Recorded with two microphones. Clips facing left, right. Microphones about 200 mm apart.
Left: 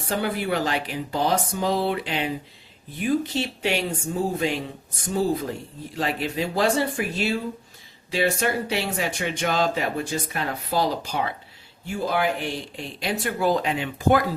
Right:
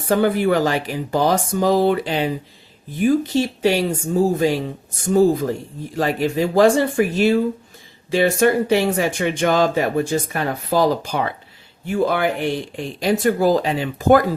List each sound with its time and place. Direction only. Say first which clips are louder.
0.1 s speech: right 9 dB; 50° right (ahead or behind)